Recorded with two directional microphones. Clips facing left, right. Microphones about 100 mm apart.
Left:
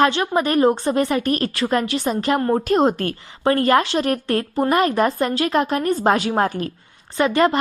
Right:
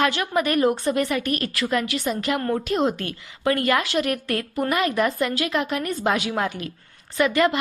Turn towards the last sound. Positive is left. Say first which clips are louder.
# left 3 dB
turn(degrees=35)  # may be behind; listen again after turning